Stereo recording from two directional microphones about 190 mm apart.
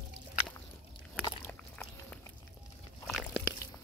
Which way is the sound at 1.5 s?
5° left (ahead or behind).